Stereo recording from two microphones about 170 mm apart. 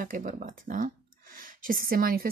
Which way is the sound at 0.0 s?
55° right (ahead or behind).